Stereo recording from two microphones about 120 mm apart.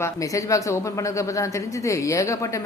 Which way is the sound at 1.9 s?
25° left (ahead or behind).